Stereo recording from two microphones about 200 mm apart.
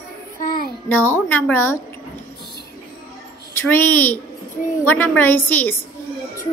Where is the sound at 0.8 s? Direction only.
10° left (ahead or behind).